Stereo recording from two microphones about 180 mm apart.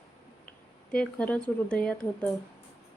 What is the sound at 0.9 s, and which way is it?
Speech, 5° left (ahead or behind).